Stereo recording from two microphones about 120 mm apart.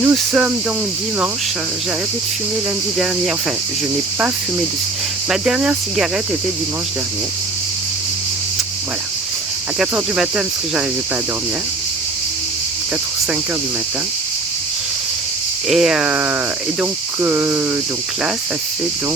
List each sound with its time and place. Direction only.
0.1 s speech: 10° right (ahead or behind)
5.3 s cricket: 5° right (ahead or behind)
9.7 s speech: 5° right (ahead or behind)
15.7 s speech: 5° right (ahead or behind)